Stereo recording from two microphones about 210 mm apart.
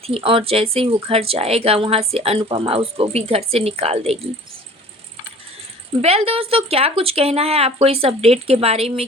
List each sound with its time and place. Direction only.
0.0 s speech: 25° right (ahead or behind)
6.0 s speech: 30° right (ahead or behind)